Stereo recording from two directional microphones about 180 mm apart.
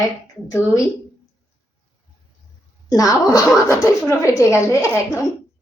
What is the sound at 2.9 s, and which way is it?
A woman's voice, 20° left (ahead or behind).